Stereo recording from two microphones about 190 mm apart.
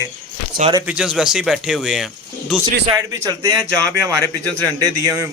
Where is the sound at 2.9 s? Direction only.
20° right (ahead or behind).